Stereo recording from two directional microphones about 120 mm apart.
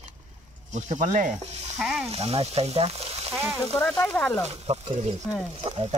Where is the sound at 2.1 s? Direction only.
55° right (ahead or behind).